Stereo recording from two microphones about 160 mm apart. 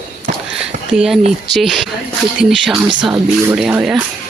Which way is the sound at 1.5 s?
Centre (ahead or behind).